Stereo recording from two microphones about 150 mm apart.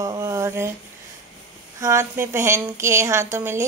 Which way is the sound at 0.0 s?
20° right (ahead or behind).